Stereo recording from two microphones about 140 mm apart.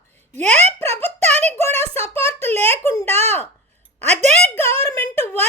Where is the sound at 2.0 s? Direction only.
45° right (ahead or behind).